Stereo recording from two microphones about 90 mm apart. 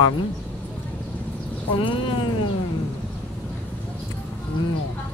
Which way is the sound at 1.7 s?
70° left (ahead or behind).